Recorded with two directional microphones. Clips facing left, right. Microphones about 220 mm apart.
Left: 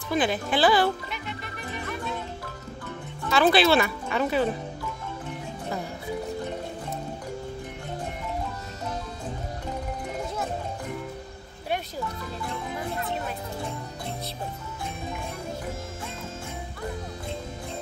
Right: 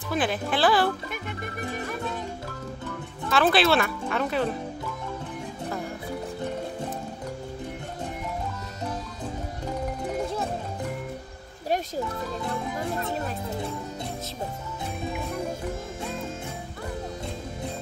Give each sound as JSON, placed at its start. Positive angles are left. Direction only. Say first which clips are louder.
{"t": 0.1, "sound": "speech", "louder": "left 1 dB", "side_deg": 0}
{"t": 1.1, "sound": "speech", "louder": "right 3 dB", "side_deg": -50}
{"t": 3.3, "sound": "speech", "louder": "left 1 dB", "side_deg": 0}